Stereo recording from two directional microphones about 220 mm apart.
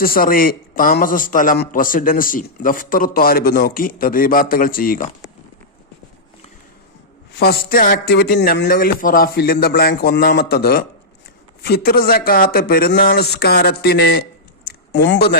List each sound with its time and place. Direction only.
0.0 s a man's voice: 40° left (ahead or behind)
7.3 s a man's voice: 45° left (ahead or behind)